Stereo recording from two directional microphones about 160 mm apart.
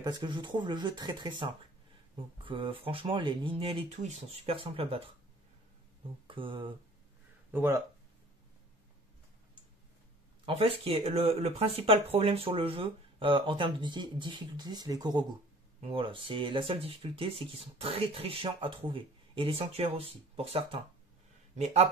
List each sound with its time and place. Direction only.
0.0 s speech: 30° right (ahead or behind)
6.2 s speech: 30° right (ahead or behind)
7.5 s speech: 15° right (ahead or behind)
10.4 s speech: 35° right (ahead or behind)